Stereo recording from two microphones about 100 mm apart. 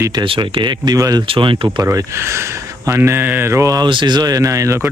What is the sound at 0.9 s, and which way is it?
Speech, 35° right (ahead or behind).